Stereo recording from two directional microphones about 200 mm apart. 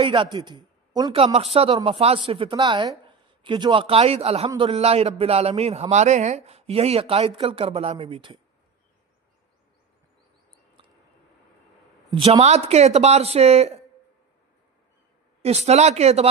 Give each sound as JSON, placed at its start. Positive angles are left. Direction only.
{"t": 0.0, "sound": "a man's voice", "side_deg": -25}
{"t": 12.1, "sound": "speech", "side_deg": -30}
{"t": 15.4, "sound": "speech", "side_deg": -30}